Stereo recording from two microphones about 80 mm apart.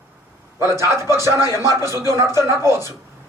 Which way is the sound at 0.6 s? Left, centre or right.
Right.